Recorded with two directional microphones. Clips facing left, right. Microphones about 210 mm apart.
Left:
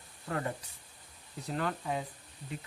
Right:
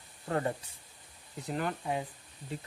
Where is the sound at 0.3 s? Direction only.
30° right (ahead or behind).